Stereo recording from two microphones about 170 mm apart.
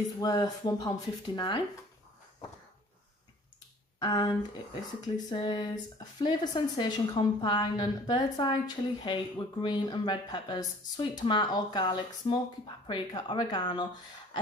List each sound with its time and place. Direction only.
0.2 s a woman's voice: 20° left (ahead or behind)
4.0 s a woman's voice: 25° left (ahead or behind)